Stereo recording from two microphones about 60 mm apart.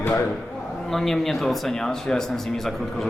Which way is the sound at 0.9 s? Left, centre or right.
Centre.